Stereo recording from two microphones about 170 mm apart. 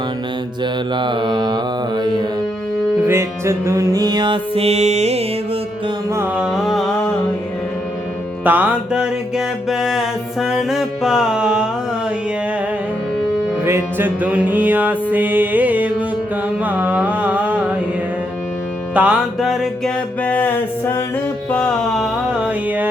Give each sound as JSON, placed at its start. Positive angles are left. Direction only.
{"t": 0.6, "sound": "music", "side_deg": -30}
{"t": 3.1, "sound": "music", "side_deg": -15}
{"t": 6.1, "sound": "music", "side_deg": -15}
{"t": 8.4, "sound": "music", "side_deg": -10}
{"t": 13.7, "sound": "music", "side_deg": -10}
{"t": 18.9, "sound": "music", "side_deg": -5}
{"t": 20.2, "sound": "music", "side_deg": 10}